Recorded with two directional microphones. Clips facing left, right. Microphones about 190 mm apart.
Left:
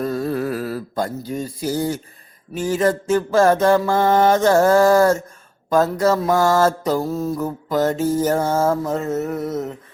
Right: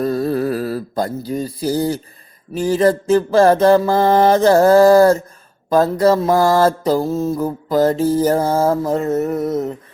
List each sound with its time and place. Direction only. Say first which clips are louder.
0.0 s music: right 4 dB; 35° right (ahead or behind)
2.6 s mantra: right 4 dB; 35° right (ahead or behind)